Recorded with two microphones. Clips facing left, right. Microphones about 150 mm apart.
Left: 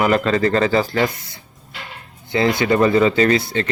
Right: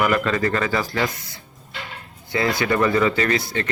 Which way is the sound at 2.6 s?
25° left (ahead or behind).